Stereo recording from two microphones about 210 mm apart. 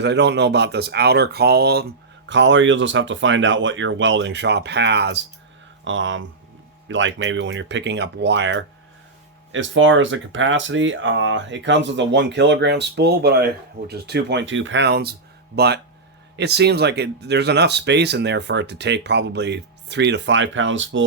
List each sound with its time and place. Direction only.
0.0 s speech: 55° right (ahead or behind)